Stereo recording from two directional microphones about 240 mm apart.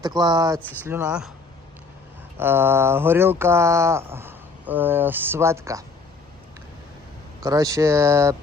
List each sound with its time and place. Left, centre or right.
0.0 s speech: centre
2.4 s speech: centre
7.4 s speech: centre